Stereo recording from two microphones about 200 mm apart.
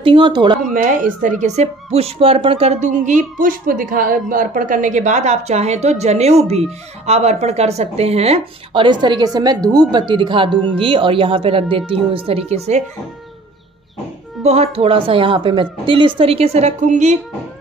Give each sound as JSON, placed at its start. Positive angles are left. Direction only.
{"t": 0.0, "sound": "speech", "side_deg": -25}
{"t": 0.8, "sound": "speech", "side_deg": -40}
{"t": 14.4, "sound": "speech", "side_deg": -30}